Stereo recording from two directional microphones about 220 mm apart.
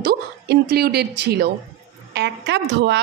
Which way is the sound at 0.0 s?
45° right (ahead or behind).